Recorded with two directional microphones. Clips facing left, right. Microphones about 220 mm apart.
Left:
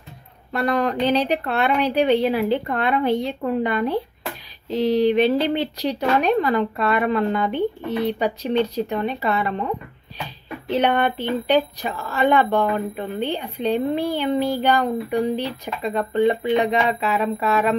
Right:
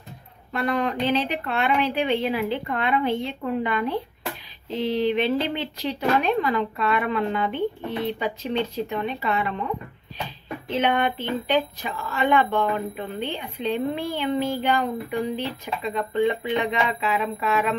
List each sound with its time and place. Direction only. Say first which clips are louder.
0.5 s speech: left 3 dB; 40° left (ahead or behind)
10.7 s speech: left 3 dB; 40° left (ahead or behind)